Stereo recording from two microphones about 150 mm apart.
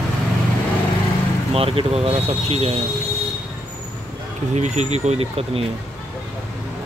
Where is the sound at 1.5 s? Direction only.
40° right (ahead or behind).